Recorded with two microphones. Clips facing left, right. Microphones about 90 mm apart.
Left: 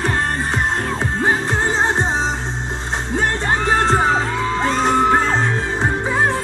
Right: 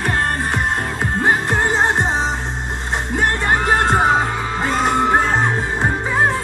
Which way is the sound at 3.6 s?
15° right (ahead or behind).